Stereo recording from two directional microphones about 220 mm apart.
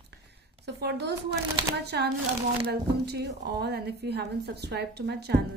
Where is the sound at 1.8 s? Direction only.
50° right (ahead or behind).